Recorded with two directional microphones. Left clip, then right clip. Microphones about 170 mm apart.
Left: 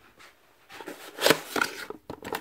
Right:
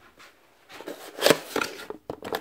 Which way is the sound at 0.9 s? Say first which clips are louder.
Right 2 dB; centre (ahead or behind).